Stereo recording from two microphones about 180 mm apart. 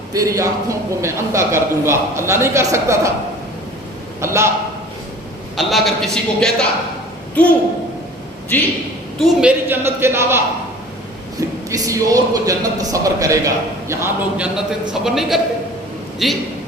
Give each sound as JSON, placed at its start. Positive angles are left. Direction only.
{"t": 0.1, "sound": "speech", "side_deg": -15}
{"t": 4.2, "sound": "speech", "side_deg": -15}
{"t": 5.5, "sound": "a man's voice", "side_deg": 0}
{"t": 9.1, "sound": "a man's voice", "side_deg": -5}